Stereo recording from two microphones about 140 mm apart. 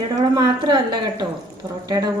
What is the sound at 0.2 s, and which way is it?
Speech, 30° right (ahead or behind).